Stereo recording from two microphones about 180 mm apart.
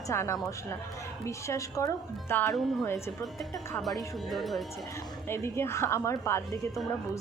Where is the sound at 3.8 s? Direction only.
Centre (ahead or behind).